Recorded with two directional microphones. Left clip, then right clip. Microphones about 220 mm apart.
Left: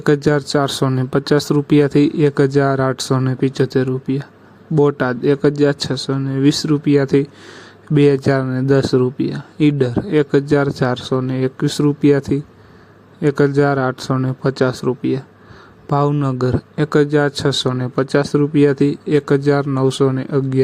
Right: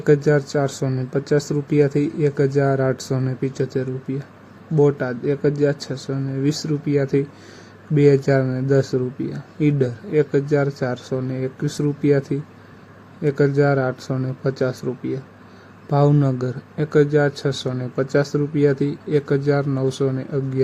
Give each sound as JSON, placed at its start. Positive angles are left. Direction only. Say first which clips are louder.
{"t": 0.0, "sound": "speech", "louder": "left 1 dB", "side_deg": 35}